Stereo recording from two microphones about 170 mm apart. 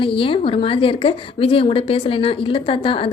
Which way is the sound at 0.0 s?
30° left (ahead or behind).